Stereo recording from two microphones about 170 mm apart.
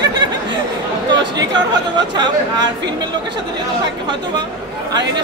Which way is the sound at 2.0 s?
25° right (ahead or behind).